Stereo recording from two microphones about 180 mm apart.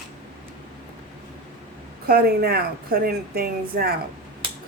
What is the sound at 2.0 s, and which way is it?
A woman's voice, 55° right (ahead or behind).